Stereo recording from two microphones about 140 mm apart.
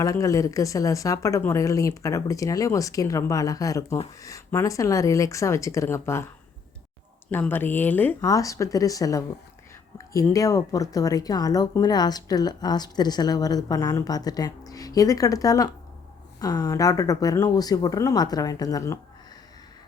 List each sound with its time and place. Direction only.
0.0 s speech: 25° left (ahead or behind)
7.3 s speech: 15° left (ahead or behind)
8.2 s speech: 25° left (ahead or behind)
10.3 s speech: 25° left (ahead or behind)